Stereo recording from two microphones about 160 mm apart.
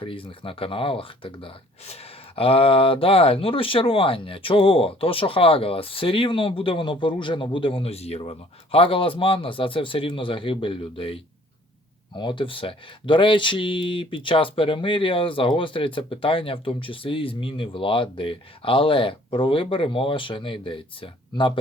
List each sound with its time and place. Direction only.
0.0 s speech: 35° left (ahead or behind)